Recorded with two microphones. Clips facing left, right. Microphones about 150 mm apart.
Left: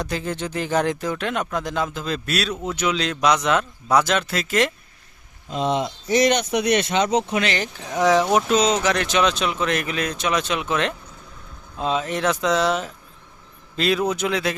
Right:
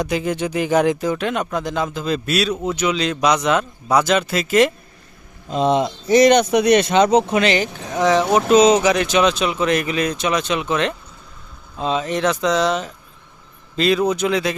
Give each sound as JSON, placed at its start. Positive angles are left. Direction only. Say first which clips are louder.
{"t": 0.0, "sound": "speech", "louder": "right 5 dB", "side_deg": -15}
{"t": 5.5, "sound": "speech", "louder": "right 5 dB", "side_deg": -35}
{"t": 7.6, "sound": "speech", "louder": "right 2 dB", "side_deg": 5}
{"t": 8.5, "sound": "speech", "louder": "right 11 dB", "side_deg": -15}
{"t": 8.9, "sound": "speech", "louder": "right 4 dB", "side_deg": -5}